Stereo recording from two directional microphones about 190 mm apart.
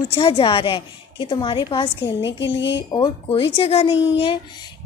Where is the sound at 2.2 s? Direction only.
70° left (ahead or behind).